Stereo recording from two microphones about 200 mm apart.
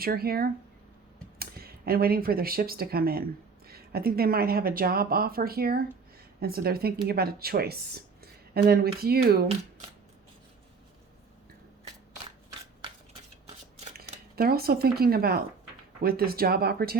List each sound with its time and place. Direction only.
0.0 s speech: 50° right (ahead or behind)
14.3 s speech: 50° right (ahead or behind)